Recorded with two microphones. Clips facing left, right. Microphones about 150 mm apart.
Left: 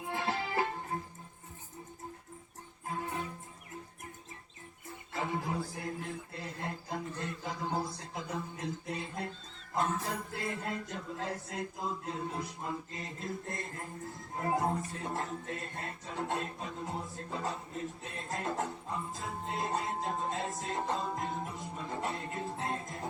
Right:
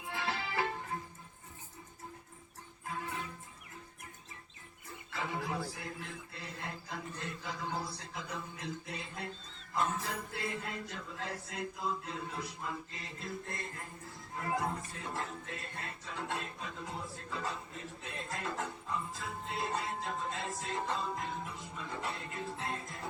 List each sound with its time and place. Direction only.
0.1 s music: 45° left (ahead or behind)
2.8 s music: 40° left (ahead or behind)
5.1 s a sound: 45° left (ahead or behind)
9.7 s music: 45° left (ahead or behind)